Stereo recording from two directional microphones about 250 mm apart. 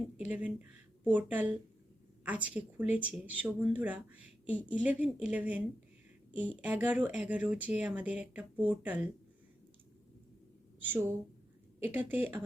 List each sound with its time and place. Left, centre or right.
0.3 s a woman's voice: centre
10.8 s a woman's voice: centre